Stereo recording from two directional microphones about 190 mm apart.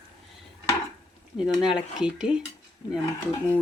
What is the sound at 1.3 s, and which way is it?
Speech, 5° right (ahead or behind).